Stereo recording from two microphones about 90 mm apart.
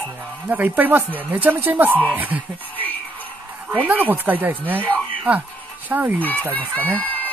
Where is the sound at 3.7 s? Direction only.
20° right (ahead or behind).